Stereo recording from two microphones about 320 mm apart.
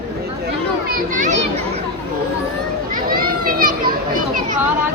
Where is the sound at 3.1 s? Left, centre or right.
Right.